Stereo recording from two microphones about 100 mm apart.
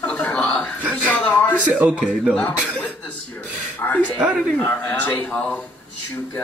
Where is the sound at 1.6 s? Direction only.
10° right (ahead or behind).